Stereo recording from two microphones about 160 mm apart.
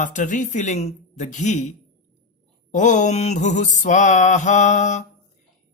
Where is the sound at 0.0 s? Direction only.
55° left (ahead or behind).